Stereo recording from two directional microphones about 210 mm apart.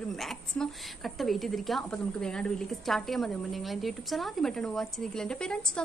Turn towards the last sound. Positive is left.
turn(degrees=5)  # may be behind; listen again after turning